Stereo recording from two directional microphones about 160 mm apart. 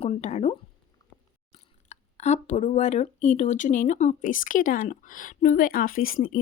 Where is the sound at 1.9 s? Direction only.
45° left (ahead or behind).